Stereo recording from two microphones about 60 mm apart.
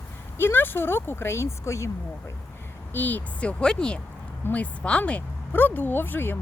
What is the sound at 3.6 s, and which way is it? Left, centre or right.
Speech, centre.